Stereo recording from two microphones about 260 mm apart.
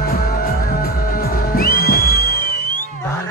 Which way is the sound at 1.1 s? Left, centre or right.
Left.